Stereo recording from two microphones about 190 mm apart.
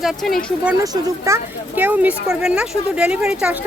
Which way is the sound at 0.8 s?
15° right (ahead or behind).